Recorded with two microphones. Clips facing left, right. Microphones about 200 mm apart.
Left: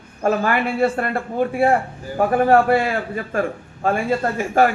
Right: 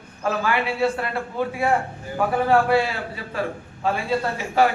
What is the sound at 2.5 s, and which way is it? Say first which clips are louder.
A man's voice: left 1 dB; 50° left (ahead or behind).